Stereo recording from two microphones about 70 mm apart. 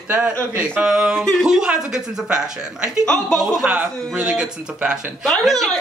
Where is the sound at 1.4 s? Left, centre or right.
Centre.